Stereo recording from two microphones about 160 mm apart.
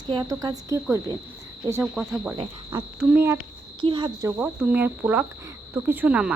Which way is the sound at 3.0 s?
15° right (ahead or behind).